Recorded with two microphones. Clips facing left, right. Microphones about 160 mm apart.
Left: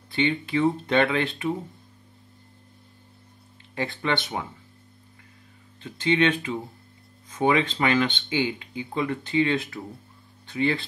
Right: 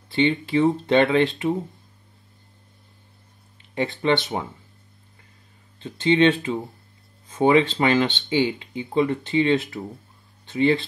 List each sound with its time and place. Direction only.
0.1 s speech: 25° right (ahead or behind)
3.7 s speech: 25° right (ahead or behind)
5.8 s speech: 25° right (ahead or behind)